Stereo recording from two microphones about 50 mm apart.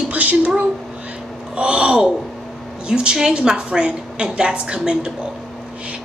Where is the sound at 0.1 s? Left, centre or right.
Right.